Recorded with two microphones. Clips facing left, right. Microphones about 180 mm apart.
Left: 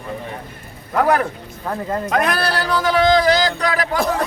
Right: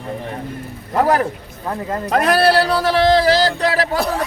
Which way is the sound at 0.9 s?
30° right (ahead or behind).